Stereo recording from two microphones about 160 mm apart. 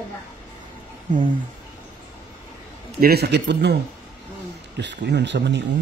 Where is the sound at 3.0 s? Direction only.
75° right (ahead or behind).